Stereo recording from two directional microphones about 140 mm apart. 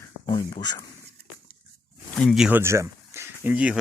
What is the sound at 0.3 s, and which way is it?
Speech, 30° left (ahead or behind).